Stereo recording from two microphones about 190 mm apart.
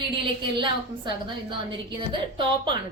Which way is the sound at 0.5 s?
25° right (ahead or behind).